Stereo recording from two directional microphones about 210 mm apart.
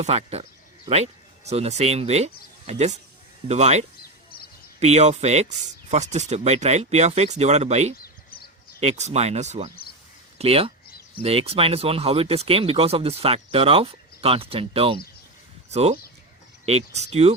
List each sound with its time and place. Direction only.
0.0 s speech: 30° right (ahead or behind)